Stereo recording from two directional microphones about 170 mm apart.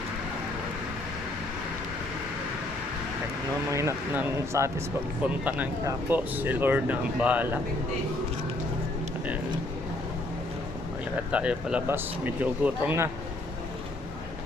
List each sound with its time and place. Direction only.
3.7 s speech: 15° right (ahead or behind)
11.3 s speech: 5° right (ahead or behind)